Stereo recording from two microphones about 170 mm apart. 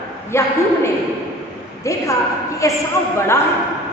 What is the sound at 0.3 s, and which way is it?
Speech, 15° left (ahead or behind).